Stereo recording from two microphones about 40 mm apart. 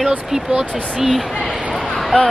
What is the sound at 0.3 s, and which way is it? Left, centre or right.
Speech, centre.